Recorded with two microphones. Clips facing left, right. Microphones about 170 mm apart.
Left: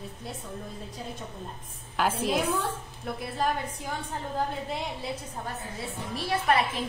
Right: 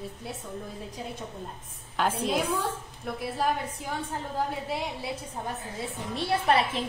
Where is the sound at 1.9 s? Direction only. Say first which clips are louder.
Even; 5° left (ahead or behind).